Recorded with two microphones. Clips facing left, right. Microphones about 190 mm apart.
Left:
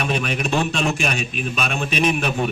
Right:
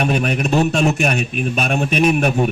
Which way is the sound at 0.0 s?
45° right (ahead or behind).